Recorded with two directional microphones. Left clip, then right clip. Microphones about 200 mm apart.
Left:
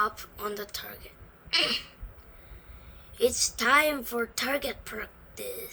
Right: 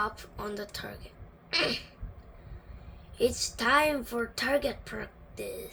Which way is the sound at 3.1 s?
45° left (ahead or behind).